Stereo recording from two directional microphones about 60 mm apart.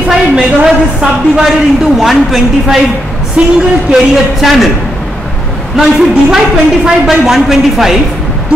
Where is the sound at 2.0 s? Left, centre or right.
Centre.